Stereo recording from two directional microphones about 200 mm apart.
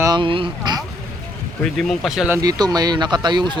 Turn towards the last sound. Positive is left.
turn(degrees=-20)  # may be behind; listen again after turning